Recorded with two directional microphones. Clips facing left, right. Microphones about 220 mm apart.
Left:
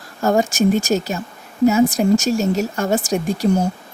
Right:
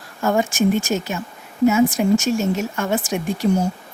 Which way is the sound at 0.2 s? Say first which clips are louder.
Left 2 dB; 40° left (ahead or behind).